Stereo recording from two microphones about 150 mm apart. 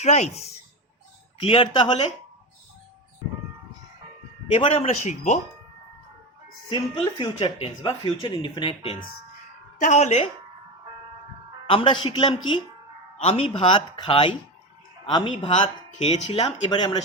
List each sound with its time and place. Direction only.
0.0 s speech: 50° left (ahead or behind)
1.4 s speech: 35° left (ahead or behind)
4.5 s a man's voice: 50° left (ahead or behind)
6.7 s speech: 25° left (ahead or behind)
7.3 s speech: 45° left (ahead or behind)
8.0 s speech: 35° left (ahead or behind)
9.7 s speech: 55° left (ahead or behind)
11.6 s speech: 35° left (ahead or behind)